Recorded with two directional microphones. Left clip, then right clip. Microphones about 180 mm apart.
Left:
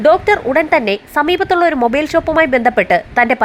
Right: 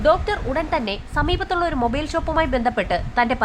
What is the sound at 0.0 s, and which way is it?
A woman's voice, 30° left (ahead or behind).